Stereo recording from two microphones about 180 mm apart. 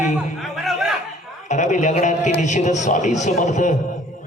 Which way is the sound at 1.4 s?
40° left (ahead or behind).